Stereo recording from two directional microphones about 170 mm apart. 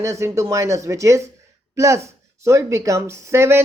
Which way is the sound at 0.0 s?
15° right (ahead or behind).